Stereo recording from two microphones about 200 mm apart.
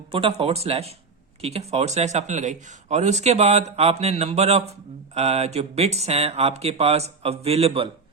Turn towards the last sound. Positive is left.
turn(degrees=-30)  # may be behind; listen again after turning